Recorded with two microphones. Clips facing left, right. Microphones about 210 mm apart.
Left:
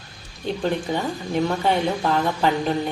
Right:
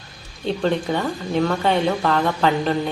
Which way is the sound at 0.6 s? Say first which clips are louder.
Right 2 dB; 10° left (ahead or behind).